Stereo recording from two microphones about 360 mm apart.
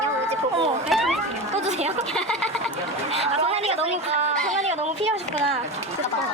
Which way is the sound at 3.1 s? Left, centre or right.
Centre.